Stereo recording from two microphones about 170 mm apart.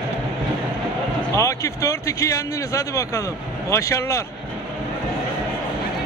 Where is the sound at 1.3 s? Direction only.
20° left (ahead or behind).